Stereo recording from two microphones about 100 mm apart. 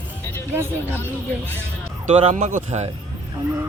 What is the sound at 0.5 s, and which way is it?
Speech, 25° right (ahead or behind).